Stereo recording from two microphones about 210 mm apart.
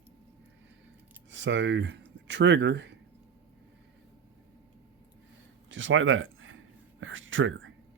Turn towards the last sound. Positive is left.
turn(degrees=-65)  # may be behind; listen again after turning